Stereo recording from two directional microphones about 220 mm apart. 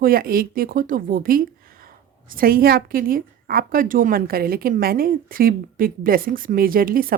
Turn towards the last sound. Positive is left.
turn(degrees=-40)  # may be behind; listen again after turning